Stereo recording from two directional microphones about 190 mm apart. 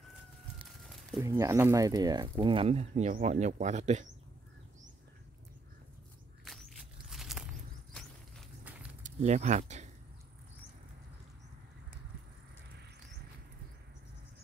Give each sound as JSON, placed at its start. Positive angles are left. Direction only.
{"t": 1.2, "sound": "speech", "side_deg": -15}
{"t": 6.4, "sound": "walk", "side_deg": 0}
{"t": 9.0, "sound": "speech", "side_deg": -35}